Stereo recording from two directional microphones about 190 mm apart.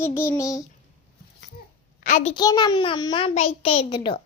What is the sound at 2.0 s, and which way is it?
Speech, 40° left (ahead or behind).